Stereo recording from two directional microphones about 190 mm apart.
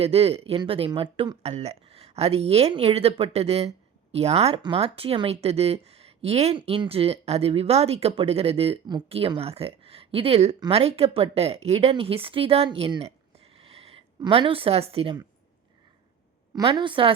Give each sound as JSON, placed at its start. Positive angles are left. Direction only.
{"t": 0.0, "sound": "speech", "side_deg": -30}
{"t": 16.6, "sound": "a woman's voice", "side_deg": -25}